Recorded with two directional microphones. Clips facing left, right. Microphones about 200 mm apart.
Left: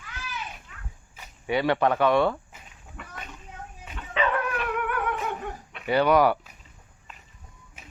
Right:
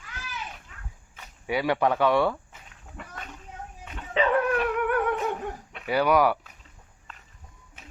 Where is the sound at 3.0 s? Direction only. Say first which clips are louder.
Right 1 dB; 35° right (ahead or behind).